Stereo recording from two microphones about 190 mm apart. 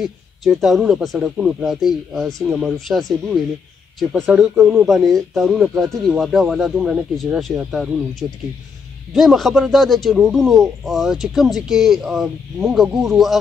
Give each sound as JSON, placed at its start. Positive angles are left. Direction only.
{"t": 0.0, "sound": "speech", "side_deg": 0}
{"t": 4.8, "sound": "speech", "side_deg": 0}